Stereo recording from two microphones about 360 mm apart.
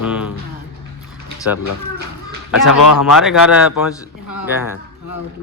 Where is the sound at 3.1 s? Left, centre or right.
Centre.